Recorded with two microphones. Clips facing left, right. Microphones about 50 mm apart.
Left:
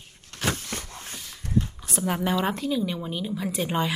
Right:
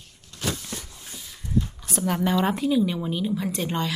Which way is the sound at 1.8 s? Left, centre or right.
Centre.